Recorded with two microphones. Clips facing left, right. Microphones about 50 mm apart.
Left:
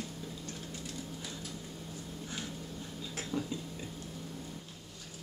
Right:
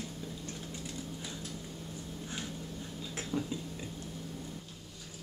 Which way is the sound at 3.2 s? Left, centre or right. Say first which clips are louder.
Right 1 dB; centre.